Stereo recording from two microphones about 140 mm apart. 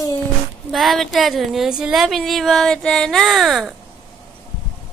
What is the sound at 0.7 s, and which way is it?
Speech, centre (ahead or behind).